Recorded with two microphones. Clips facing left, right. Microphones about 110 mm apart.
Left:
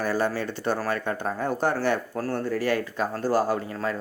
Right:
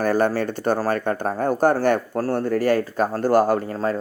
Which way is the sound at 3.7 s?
40° right (ahead or behind).